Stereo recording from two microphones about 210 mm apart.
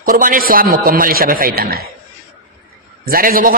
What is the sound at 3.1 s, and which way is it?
Speech, 45° right (ahead or behind).